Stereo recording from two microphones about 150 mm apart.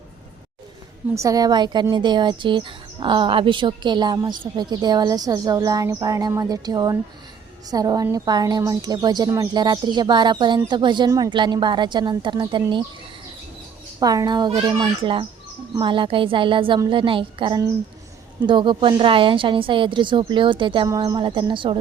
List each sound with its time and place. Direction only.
1.1 s speech: 20° right (ahead or behind)
14.0 s speech: 25° right (ahead or behind)